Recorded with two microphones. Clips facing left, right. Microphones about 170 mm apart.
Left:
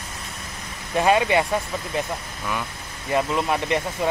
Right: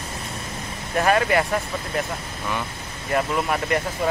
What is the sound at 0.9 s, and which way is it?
Speech, 20° left (ahead or behind).